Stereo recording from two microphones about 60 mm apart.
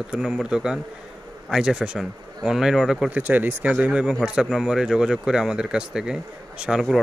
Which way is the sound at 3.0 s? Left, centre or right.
Right.